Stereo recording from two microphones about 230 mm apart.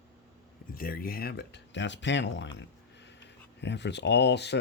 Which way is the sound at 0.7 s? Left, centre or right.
Left.